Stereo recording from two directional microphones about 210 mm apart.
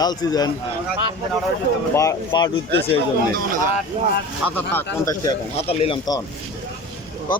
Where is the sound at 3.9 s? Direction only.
30° right (ahead or behind).